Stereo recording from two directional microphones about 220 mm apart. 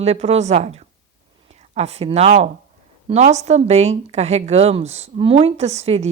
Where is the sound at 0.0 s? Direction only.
30° right (ahead or behind).